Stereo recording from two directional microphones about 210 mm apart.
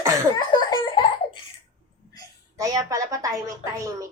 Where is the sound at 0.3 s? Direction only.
20° left (ahead or behind).